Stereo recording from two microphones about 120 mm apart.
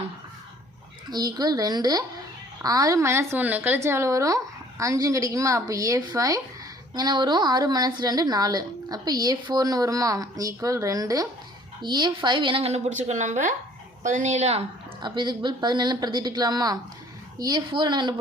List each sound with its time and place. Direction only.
1.1 s a woman's voice: 35° right (ahead or behind); by 14.6 s 65° right (ahead or behind)
15.0 s a woman's voice: 40° right (ahead or behind)